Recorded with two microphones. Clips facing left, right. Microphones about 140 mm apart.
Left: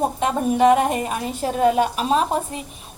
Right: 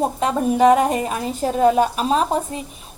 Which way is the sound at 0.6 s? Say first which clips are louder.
Right 1 dB; 35° right (ahead or behind).